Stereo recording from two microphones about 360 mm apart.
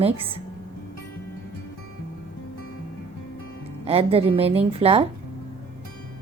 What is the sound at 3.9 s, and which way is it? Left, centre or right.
A woman's voice, centre.